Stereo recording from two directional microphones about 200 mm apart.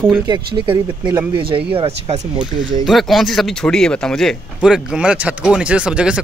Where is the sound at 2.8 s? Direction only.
Centre (ahead or behind).